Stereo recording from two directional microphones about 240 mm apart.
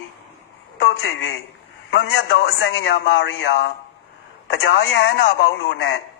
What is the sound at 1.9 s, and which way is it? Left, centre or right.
Speech, left.